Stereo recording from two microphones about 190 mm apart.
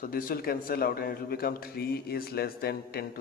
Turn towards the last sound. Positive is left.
turn(degrees=55)  # may be behind; listen again after turning